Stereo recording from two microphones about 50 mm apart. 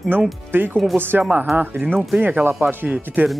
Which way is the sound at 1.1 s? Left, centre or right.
Right.